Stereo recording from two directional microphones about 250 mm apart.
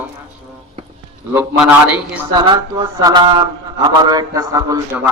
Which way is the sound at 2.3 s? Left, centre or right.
Centre.